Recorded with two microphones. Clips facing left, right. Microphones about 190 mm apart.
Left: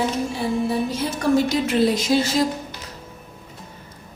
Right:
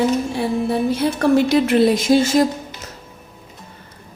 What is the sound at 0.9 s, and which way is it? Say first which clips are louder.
A woman's voice: right 5 dB; 60° right (ahead or behind).